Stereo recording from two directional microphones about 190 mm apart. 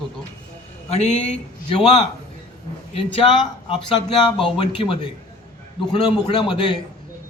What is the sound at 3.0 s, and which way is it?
A man's voice, 30° left (ahead or behind).